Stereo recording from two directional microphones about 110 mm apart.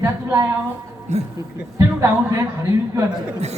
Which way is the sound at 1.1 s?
90° right.